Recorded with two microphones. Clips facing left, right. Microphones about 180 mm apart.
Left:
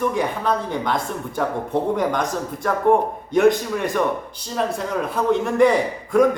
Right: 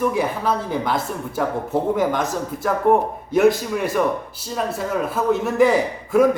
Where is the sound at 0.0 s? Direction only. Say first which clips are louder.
Right 1 dB; 5° right (ahead or behind).